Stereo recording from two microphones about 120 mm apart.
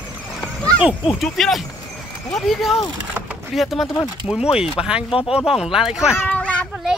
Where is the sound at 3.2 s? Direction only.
15° right (ahead or behind).